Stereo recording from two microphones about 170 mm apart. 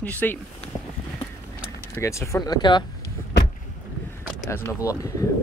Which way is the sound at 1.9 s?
15° left (ahead or behind).